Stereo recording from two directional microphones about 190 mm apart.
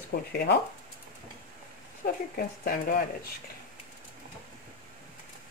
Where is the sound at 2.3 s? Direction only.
50° left (ahead or behind).